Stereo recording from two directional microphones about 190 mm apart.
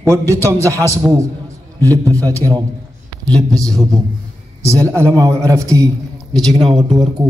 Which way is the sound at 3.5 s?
20° right (ahead or behind).